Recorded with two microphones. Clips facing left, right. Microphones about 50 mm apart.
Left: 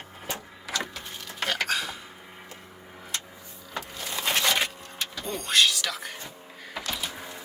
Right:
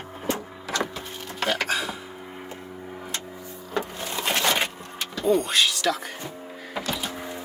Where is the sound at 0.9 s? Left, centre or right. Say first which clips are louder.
Right 4 dB; right.